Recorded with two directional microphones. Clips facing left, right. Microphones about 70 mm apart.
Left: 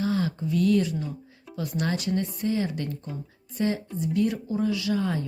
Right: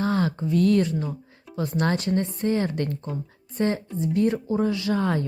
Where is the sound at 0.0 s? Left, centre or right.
Right.